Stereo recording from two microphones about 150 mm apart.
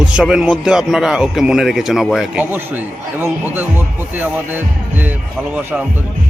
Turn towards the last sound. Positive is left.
turn(degrees=-10)  # may be behind; listen again after turning